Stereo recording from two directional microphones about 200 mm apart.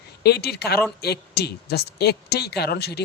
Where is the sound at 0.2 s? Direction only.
55° left (ahead or behind).